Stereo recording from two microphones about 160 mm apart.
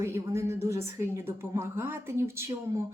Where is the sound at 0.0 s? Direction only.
20° right (ahead or behind).